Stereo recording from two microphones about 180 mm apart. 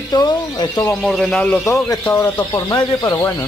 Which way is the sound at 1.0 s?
5° left (ahead or behind).